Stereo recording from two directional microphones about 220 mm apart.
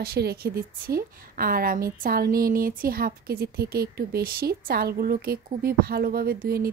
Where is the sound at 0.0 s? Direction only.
45° right (ahead or behind).